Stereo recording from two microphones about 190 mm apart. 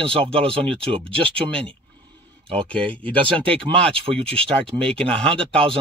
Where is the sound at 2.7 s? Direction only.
5° left (ahead or behind).